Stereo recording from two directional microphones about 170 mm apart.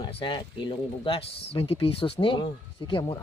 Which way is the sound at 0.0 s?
30° left (ahead or behind).